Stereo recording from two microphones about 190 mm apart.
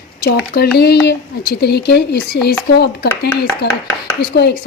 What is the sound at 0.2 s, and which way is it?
A woman's voice, 60° left (ahead or behind).